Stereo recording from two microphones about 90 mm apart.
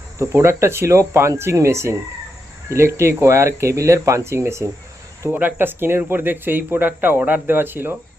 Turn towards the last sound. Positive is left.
turn(degrees=-25)  # may be behind; listen again after turning